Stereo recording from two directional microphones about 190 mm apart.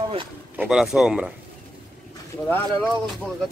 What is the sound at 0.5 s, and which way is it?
Speech, 5° right (ahead or behind).